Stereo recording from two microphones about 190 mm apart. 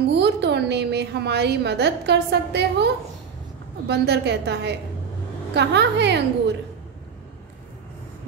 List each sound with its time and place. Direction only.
0.0 s a woman's voice: 65° right (ahead or behind)